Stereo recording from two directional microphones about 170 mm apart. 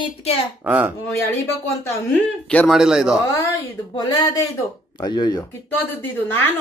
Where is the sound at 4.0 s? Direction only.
25° left (ahead or behind).